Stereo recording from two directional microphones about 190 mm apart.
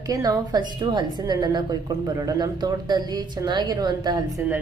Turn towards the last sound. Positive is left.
turn(degrees=-20)  # may be behind; listen again after turning